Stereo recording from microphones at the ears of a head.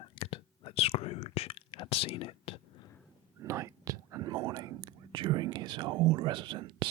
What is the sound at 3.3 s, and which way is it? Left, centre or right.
Whispering, right.